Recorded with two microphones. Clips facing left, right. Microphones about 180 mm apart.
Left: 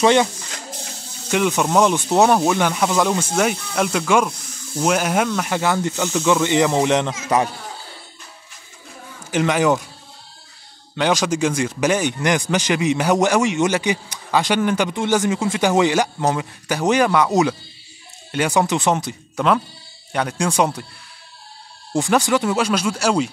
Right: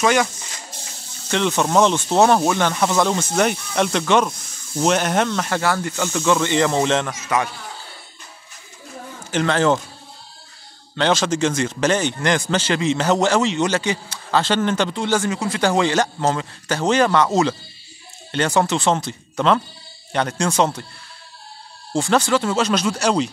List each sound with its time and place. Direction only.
0.0 s speech: 25° left (ahead or behind)
1.3 s a man's voice: 10° left (ahead or behind)
7.2 s speech: 35° left (ahead or behind)
9.3 s a man's voice: 15° left (ahead or behind)
11.0 s a man's voice: 10° left (ahead or behind)
21.9 s a man's voice: 15° left (ahead or behind)